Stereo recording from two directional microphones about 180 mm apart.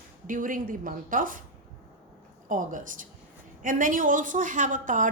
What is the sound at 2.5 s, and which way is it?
A woman's voice, 45° right (ahead or behind).